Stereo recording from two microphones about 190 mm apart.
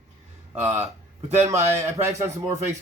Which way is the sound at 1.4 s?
15° right (ahead or behind).